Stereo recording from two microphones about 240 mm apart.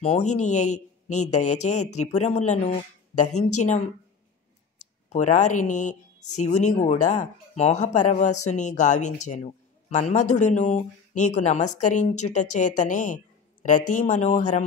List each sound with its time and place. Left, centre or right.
0.0 s speech: left